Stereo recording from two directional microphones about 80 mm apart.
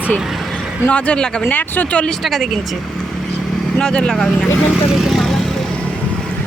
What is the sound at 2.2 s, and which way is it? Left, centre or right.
Speech, centre.